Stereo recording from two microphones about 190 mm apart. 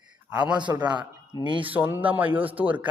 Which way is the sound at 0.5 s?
20° right (ahead or behind).